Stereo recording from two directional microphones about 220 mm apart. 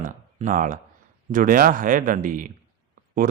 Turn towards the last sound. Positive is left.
turn(degrees=-40)  # may be behind; listen again after turning